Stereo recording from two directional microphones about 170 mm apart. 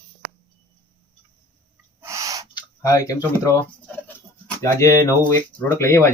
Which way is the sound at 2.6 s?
20° left (ahead or behind).